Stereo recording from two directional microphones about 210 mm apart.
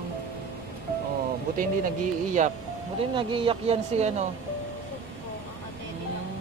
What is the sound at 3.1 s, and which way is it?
Speech, 25° right (ahead or behind).